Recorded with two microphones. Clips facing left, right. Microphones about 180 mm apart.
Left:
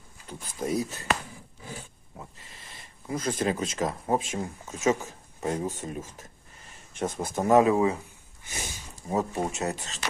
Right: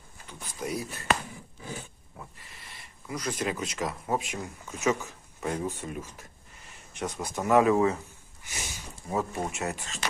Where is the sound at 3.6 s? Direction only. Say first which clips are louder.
Left 3 dB; 25° left (ahead or behind).